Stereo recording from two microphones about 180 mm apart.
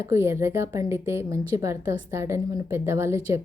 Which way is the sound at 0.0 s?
15° right (ahead or behind).